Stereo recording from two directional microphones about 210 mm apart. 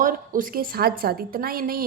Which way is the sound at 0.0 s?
40° right (ahead or behind).